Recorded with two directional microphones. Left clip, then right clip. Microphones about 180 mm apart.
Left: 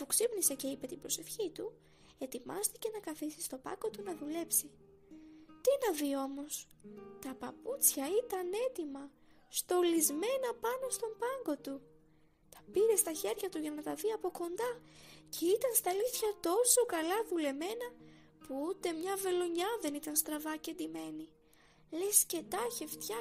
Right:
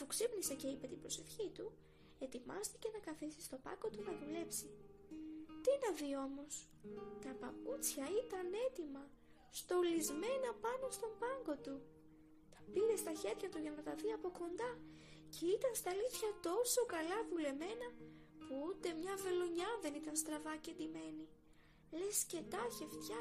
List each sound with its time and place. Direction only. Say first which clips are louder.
0.0 s speech: left 7 dB; 45° left (ahead or behind)
5.6 s speech: left 6 dB; 45° left (ahead or behind)
12.7 s speech: left 7 dB; 50° left (ahead or behind)